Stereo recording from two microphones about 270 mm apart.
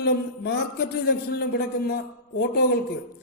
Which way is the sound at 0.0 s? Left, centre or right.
Left.